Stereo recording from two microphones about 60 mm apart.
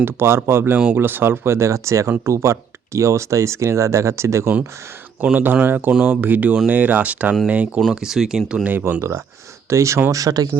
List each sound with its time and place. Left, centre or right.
0.0 s speech: right
5.6 s speech: right
7.8 s speech: centre
8.8 s speech: right
10.1 s speech: right